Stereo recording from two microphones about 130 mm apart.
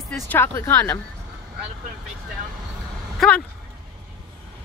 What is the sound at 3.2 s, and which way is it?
Speech, 10° left (ahead or behind).